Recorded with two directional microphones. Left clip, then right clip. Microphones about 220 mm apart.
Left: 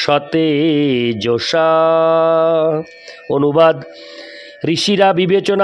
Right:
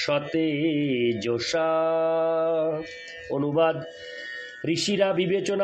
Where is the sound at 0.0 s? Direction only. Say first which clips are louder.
Left 10 dB; 50° left (ahead or behind).